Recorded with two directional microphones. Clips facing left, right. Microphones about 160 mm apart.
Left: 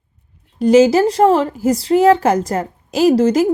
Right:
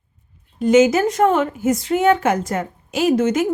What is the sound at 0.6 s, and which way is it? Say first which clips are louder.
A woman's voice: left 3 dB; 35° left (ahead or behind).